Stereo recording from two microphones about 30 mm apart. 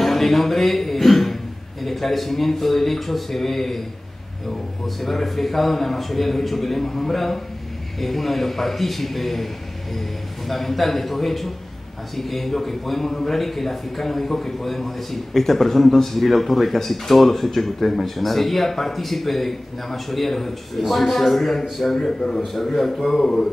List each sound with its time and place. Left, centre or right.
0.0 s a man's voice: centre
4.8 s a man's voice: centre
21.9 s a man's voice: centre
22.4 s a man's voice: centre